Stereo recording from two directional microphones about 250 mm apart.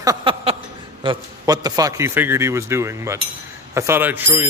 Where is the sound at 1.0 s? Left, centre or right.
Centre.